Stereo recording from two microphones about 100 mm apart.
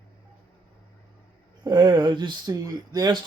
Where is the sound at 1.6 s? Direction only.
50° right (ahead or behind).